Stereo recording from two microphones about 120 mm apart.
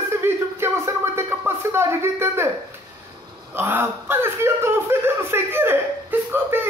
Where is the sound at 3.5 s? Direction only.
20° right (ahead or behind).